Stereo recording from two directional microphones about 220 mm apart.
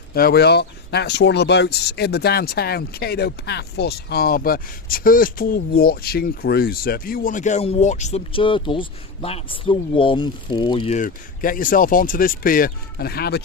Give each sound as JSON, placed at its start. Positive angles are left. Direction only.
{"t": 0.1, "sound": "speech", "side_deg": 45}